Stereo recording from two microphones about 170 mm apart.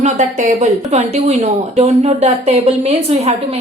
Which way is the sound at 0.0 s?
45° right (ahead or behind).